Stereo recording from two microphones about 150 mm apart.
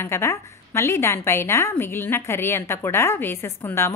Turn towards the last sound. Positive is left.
turn(degrees=15)  # may be behind; listen again after turning